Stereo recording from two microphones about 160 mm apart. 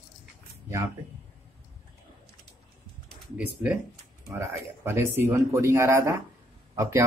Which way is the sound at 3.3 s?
10° right (ahead or behind).